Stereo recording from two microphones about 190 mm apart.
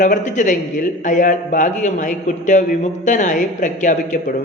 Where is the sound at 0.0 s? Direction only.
40° left (ahead or behind).